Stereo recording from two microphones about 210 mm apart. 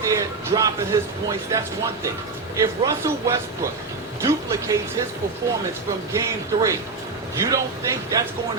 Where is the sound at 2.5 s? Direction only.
15° right (ahead or behind).